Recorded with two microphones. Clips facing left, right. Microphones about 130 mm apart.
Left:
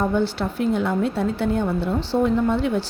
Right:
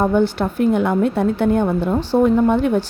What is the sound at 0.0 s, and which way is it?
A woman's voice, 55° right (ahead or behind).